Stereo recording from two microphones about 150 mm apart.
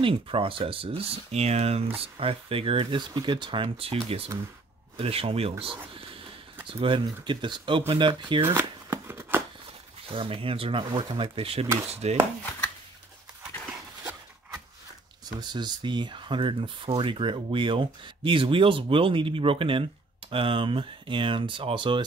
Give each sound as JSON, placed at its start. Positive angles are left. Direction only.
{"t": 0.0, "sound": "speech", "side_deg": -35}
{"t": 6.8, "sound": "speech", "side_deg": -35}
{"t": 8.9, "sound": "a sound", "side_deg": -15}
{"t": 10.0, "sound": "speech", "side_deg": -35}
{"t": 11.9, "sound": "chopping", "side_deg": -45}
{"t": 15.5, "sound": "speech", "side_deg": -30}